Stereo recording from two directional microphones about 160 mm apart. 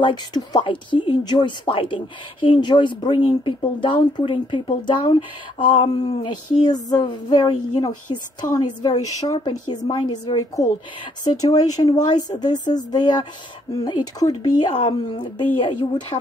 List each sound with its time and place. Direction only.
0.0 s speech: 25° left (ahead or behind)
5.6 s a sound: 35° left (ahead or behind)
15.6 s speech: 35° left (ahead or behind)